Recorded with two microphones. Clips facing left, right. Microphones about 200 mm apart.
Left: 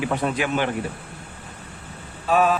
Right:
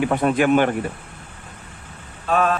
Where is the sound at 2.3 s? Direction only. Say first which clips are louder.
Left 1 dB; 5° left (ahead or behind).